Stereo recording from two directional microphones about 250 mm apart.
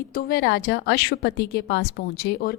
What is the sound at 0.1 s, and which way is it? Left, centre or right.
A woman's voice, left.